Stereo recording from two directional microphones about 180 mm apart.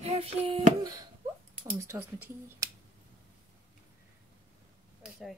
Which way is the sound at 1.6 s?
15° right (ahead or behind).